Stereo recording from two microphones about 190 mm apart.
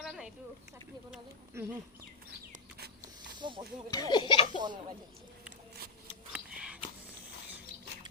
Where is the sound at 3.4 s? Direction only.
25° right (ahead or behind).